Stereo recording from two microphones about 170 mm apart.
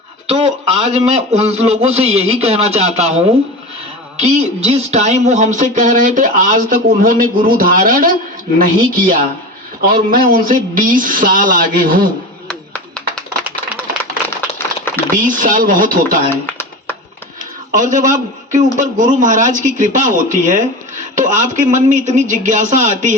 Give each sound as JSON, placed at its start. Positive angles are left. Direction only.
{"t": 0.3, "sound": "a man's voice", "side_deg": -35}
{"t": 4.2, "sound": "speech", "side_deg": -40}
{"t": 12.5, "sound": "a sound", "side_deg": 5}
{"t": 15.1, "sound": "speech", "side_deg": -50}
{"t": 16.3, "sound": "a sound", "side_deg": 15}
{"t": 17.7, "sound": "a man's voice", "side_deg": -50}